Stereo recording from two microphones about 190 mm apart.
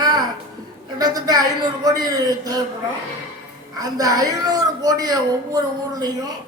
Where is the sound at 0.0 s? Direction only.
20° right (ahead or behind).